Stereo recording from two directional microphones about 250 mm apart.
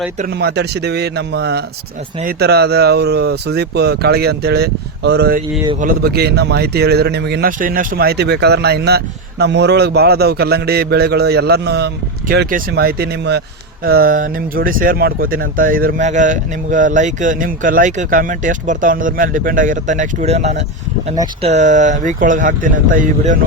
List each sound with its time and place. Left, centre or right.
0.2 s speech: right